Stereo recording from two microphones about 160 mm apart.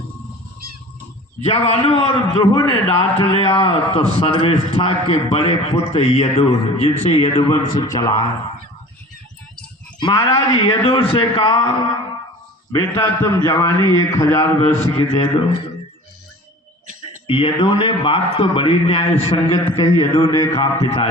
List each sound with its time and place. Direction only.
1.4 s a man's voice: 40° left (ahead or behind)
2.4 s a man's voice: 30° left (ahead or behind)
7.1 s a man's voice: 30° left (ahead or behind)
10.0 s a man's voice: 25° left (ahead or behind)
12.7 s a man's voice: 20° left (ahead or behind)
14.6 s a man's voice: 40° left (ahead or behind)
17.2 s a man's voice: 35° left (ahead or behind)
20.0 s a man's voice: 25° left (ahead or behind)
20.5 s a man's voice: 35° left (ahead or behind)